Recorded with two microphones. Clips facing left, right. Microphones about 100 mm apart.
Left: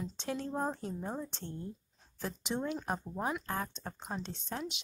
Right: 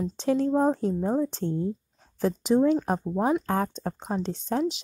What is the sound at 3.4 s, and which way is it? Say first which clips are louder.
A woman's voice: right 11 dB; 50° right (ahead or behind).